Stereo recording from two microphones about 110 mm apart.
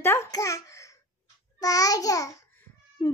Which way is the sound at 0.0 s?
20° left (ahead or behind).